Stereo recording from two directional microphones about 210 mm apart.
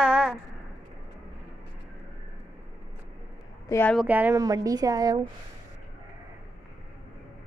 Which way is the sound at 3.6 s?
10° left (ahead or behind).